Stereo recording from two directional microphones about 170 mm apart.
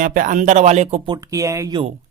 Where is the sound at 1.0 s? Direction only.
20° right (ahead or behind).